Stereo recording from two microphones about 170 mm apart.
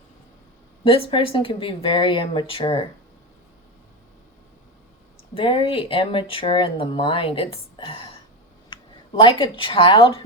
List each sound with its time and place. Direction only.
0.9 s speech: 30° left (ahead or behind)
5.3 s speech: 30° left (ahead or behind)
9.2 s speech: 30° left (ahead or behind)